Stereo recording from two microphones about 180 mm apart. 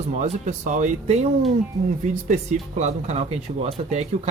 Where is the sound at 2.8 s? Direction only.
40° right (ahead or behind).